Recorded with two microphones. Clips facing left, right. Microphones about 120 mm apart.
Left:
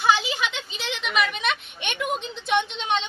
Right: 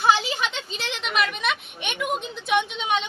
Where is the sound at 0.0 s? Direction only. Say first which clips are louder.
Right 1 dB; 35° right (ahead or behind).